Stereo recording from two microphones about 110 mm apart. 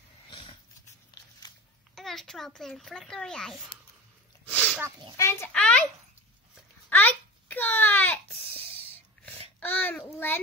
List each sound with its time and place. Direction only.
0.3 s sniff: 50° left (ahead or behind)
1.4 s babbling: 40° left (ahead or behind)
2.0 s a child's voice: 5° left (ahead or behind)
4.5 s sneeze: 10° left (ahead or behind)
5.1 s a child's voice: 25° left (ahead or behind)
5.5 s a child's voice: 10° left (ahead or behind)
6.9 s a sound: 15° left (ahead or behind)
8.5 s a sound: 60° right (ahead or behind)
9.6 s babbling: 15° left (ahead or behind)
10.0 s a child's voice: 20° left (ahead or behind)